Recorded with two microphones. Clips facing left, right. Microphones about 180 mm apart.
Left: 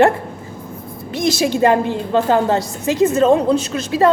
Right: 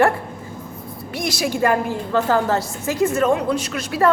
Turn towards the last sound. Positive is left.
turn(degrees=20)  # may be behind; listen again after turning